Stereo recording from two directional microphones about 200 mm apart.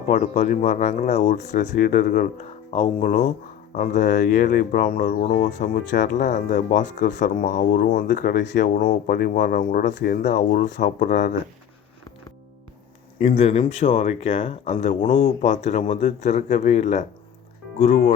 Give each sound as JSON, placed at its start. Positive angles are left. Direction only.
{"t": 0.1, "sound": "speech", "side_deg": 40}
{"t": 13.2, "sound": "speech", "side_deg": 30}